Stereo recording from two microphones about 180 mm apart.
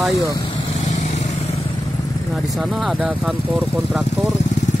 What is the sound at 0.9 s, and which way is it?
Vehicle, 40° left (ahead or behind).